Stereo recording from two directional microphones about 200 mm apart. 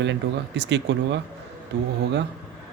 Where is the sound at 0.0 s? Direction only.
60° right (ahead or behind).